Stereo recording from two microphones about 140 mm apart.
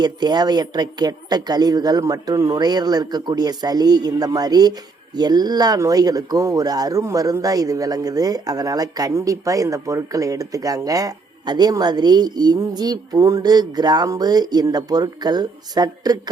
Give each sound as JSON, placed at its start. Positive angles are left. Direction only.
{"t": 0.0, "sound": "speech", "side_deg": -30}